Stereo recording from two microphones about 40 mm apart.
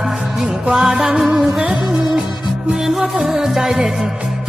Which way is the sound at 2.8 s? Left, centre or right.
Centre.